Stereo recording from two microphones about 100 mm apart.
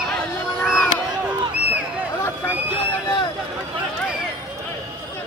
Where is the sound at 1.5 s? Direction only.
15° right (ahead or behind).